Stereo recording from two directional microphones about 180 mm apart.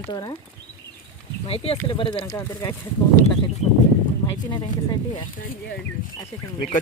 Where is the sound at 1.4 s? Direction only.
30° left (ahead or behind).